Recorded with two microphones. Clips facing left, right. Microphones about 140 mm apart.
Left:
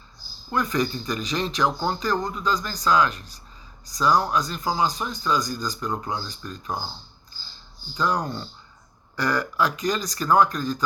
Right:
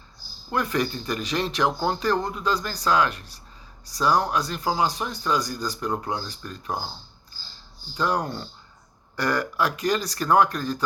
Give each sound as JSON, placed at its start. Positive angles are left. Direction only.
{"t": 0.5, "sound": "speech", "side_deg": -60}
{"t": 7.9, "sound": "speech", "side_deg": -60}